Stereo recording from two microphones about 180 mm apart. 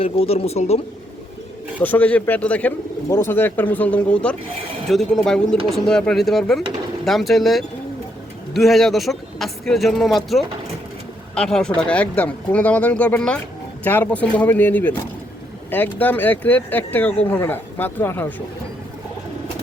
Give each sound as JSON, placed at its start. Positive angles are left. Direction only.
{"t": 0.0, "sound": "speech", "side_deg": 35}
{"t": 1.8, "sound": "speech", "side_deg": 10}